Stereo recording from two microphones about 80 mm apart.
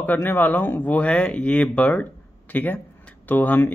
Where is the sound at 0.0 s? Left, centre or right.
Left.